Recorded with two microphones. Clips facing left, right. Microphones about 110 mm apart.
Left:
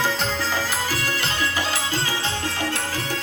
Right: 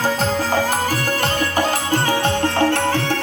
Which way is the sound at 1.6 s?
50° right (ahead or behind).